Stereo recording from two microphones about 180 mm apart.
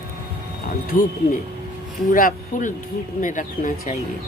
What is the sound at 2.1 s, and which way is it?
Speech, 50° left (ahead or behind).